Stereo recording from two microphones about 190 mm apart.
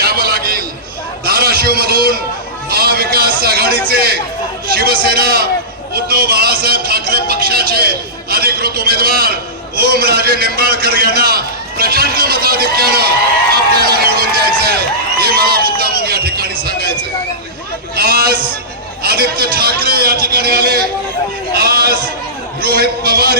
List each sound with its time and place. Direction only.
0.0 s a sound: 55° right (ahead or behind)
2.6 s music: 55° right (ahead or behind)
3.8 s chatter: 55° right (ahead or behind)
4.7 s a man's voice: 55° right (ahead or behind)
13.7 s run: 55° right (ahead or behind)
15.2 s speech: 55° right (ahead or behind)
17.9 s a man's voice: 55° right (ahead or behind)